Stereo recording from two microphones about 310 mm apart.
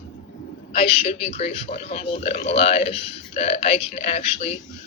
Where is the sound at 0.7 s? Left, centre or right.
Centre.